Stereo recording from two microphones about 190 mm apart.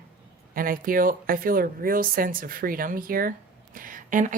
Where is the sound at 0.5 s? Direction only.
50° right (ahead or behind).